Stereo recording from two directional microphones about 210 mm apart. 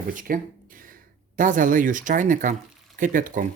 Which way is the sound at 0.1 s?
40° right (ahead or behind).